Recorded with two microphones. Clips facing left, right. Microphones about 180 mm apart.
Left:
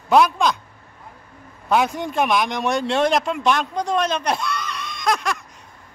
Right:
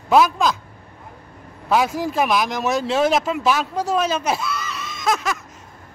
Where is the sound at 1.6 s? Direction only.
Centre (ahead or behind).